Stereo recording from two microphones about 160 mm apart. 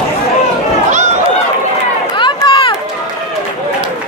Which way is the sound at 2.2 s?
30° left (ahead or behind).